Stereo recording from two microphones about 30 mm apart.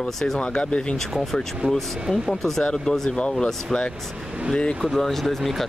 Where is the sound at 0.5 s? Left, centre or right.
Left.